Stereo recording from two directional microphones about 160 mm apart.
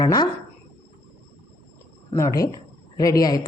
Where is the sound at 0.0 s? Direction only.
25° left (ahead or behind).